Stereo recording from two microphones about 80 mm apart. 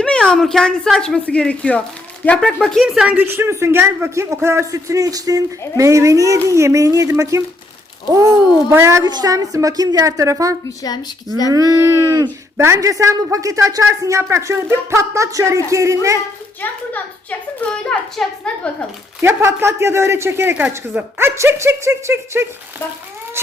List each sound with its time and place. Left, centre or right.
0.0 s a sound: centre
0.3 s a woman's voice: centre
2.8 s speech: centre
3.2 s a woman's voice: right
8.7 s speech: right
9.0 s a woman's voice: right
12.5 s speech: right
16.6 s a child's voice: left
17.6 s a woman's voice: centre
19.2 s speech: right